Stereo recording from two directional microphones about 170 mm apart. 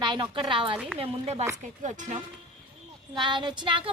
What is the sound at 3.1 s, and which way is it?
Speech, 30° right (ahead or behind).